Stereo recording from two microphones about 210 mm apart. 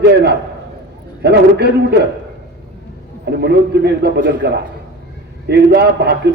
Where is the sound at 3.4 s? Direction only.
55° right (ahead or behind).